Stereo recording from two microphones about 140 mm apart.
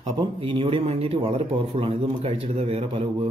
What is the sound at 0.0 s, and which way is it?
A man's voice, 40° right (ahead or behind).